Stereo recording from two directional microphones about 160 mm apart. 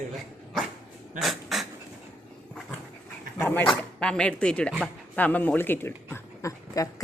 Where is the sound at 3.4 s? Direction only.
15° left (ahead or behind).